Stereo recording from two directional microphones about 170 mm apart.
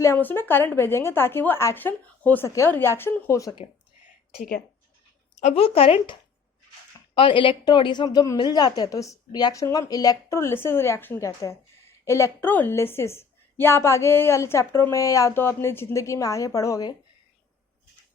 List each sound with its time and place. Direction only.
0.0 s a woman's voice: 15° left (ahead or behind)
4.4 s speech: 60° left (ahead or behind)
5.4 s a woman's voice: 40° left (ahead or behind); by 16.9 s 20° left (ahead or behind)